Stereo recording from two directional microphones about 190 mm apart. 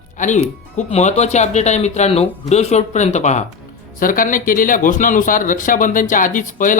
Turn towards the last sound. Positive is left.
turn(degrees=45)  # may be behind; listen again after turning